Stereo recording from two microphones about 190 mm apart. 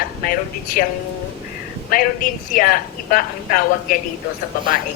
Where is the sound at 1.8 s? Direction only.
45° left (ahead or behind).